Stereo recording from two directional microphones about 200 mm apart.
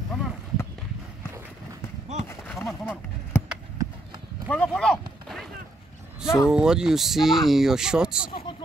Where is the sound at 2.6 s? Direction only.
10° left (ahead or behind).